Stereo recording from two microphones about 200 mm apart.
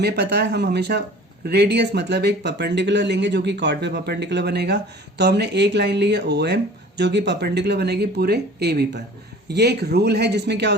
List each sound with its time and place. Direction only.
0.0 s speech: 55° right (ahead or behind)